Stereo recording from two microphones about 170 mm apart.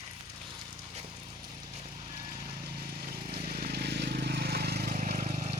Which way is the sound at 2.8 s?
60° right (ahead or behind).